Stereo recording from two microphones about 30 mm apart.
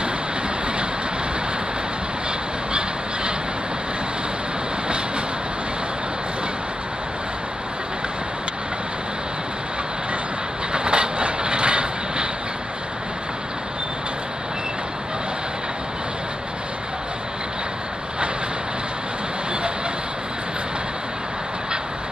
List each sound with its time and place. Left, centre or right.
10.7 s vehicle: right